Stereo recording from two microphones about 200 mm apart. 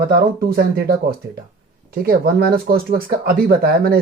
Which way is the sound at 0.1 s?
50° right (ahead or behind).